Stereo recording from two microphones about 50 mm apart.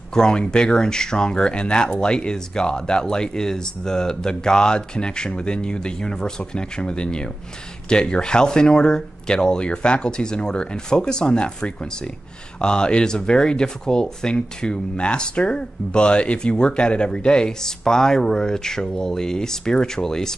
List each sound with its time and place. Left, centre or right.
0.1 s speech: centre